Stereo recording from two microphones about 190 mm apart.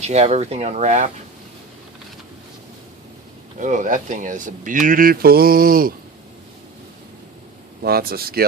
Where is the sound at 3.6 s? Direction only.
40° right (ahead or behind).